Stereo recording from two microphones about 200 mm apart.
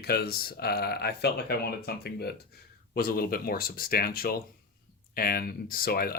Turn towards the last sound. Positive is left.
turn(degrees=50)  # may be behind; listen again after turning